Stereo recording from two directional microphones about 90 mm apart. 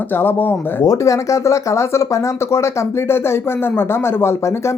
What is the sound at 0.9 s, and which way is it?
Speech, 35° left (ahead or behind).